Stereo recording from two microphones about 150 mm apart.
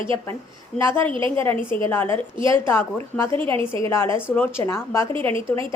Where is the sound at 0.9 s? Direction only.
35° right (ahead or behind).